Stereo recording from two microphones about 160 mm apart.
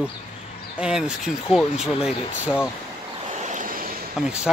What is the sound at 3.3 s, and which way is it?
Waves, 45° right (ahead or behind).